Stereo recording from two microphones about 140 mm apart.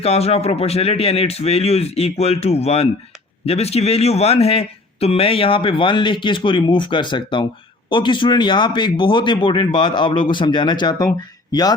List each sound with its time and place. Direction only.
0.0 s a man's voice: 45° left (ahead or behind); by 11.7 s 25° left (ahead or behind)